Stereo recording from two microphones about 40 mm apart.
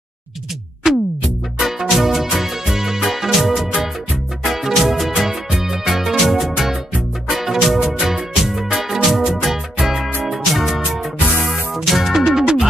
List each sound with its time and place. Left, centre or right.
0.8 s music: centre